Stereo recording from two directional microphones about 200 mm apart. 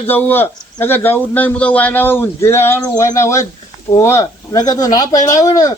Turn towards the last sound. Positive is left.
turn(degrees=20)  # may be behind; listen again after turning